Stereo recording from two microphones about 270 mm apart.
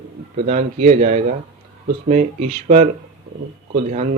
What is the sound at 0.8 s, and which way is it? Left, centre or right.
Speech, right.